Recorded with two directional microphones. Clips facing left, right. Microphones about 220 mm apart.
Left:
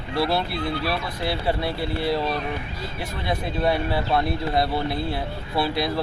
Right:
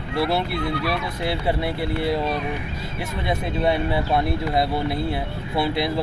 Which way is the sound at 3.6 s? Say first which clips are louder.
Right 1 dB; 20° right (ahead or behind).